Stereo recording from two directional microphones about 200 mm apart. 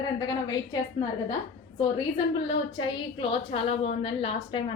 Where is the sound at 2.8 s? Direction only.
25° left (ahead or behind).